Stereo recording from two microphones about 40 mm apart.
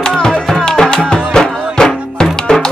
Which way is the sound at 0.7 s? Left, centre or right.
Centre.